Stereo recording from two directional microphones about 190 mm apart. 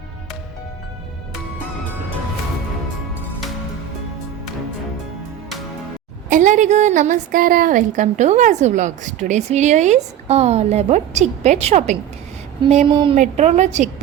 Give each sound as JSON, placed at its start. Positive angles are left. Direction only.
{"t": 6.3, "sound": "a woman's voice", "side_deg": -40}
{"t": 12.9, "sound": "speech", "side_deg": -25}
{"t": 13.1, "sound": "a woman's voice", "side_deg": -40}